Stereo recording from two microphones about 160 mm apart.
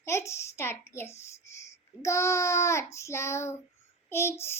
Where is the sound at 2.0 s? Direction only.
20° left (ahead or behind).